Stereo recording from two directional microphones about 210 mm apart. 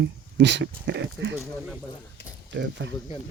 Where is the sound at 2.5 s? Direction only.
60° right (ahead or behind).